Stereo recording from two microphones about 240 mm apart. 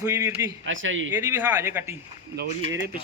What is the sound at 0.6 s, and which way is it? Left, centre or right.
Speech, right.